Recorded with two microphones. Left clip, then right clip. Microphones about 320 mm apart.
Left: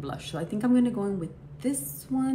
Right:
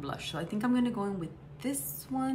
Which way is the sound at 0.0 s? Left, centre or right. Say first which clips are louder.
Left 2 dB; centre.